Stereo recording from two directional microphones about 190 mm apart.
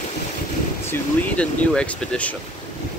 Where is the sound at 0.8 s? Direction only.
5° left (ahead or behind).